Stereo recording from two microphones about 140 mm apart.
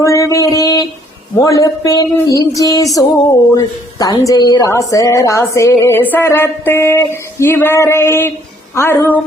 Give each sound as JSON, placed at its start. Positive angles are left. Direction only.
{"t": 0.0, "sound": "speech", "side_deg": 20}